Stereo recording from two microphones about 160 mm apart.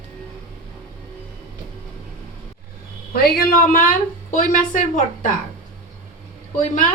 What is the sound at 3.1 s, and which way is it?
Speech, 70° left (ahead or behind).